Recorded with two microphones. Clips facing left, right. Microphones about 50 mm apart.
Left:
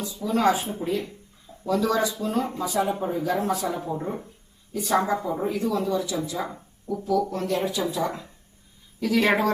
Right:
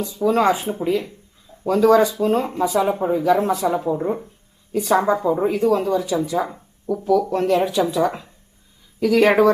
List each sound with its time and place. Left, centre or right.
0.3 s speech: right
3.8 s speech: right
4.7 s speech: right
5.5 s speech: right